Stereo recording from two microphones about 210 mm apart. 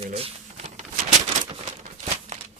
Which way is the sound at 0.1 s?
30° right (ahead or behind).